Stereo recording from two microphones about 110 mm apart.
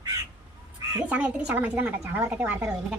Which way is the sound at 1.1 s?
15° right (ahead or behind).